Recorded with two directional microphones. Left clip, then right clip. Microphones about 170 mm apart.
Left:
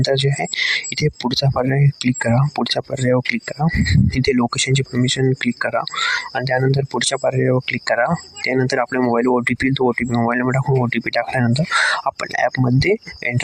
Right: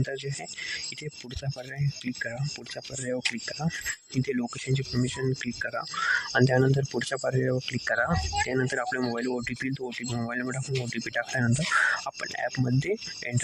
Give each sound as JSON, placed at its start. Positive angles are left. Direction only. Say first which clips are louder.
{"t": 0.0, "sound": "speech", "louder": "left 16 dB", "side_deg": 45}
{"t": 6.3, "sound": "speech", "louder": "left 5 dB", "side_deg": 25}